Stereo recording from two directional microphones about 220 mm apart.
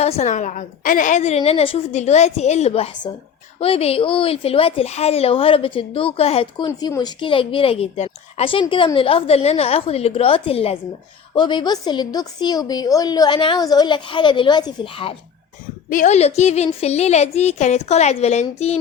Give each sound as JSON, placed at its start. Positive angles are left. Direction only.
{"t": 0.0, "sound": "a woman's voice", "side_deg": 30}
{"t": 6.7, "sound": "a woman's voice", "side_deg": 15}
{"t": 15.9, "sound": "a woman's voice", "side_deg": 35}